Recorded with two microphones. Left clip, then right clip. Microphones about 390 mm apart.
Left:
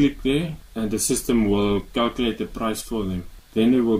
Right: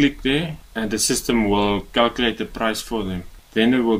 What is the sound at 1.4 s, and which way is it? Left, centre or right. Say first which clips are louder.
Speech: right 4 dB; right.